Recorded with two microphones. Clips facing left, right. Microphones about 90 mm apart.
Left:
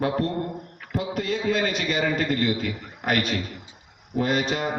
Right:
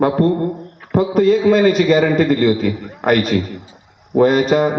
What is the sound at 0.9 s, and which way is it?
A man's voice, 45° right (ahead or behind).